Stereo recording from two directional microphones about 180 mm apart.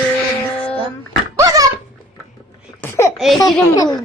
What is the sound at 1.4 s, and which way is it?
Dog, 20° right (ahead or behind).